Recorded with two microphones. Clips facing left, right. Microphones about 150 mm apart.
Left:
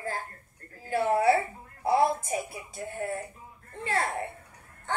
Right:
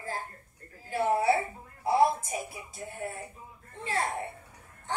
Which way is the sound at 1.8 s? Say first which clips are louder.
Even; 60° left (ahead or behind).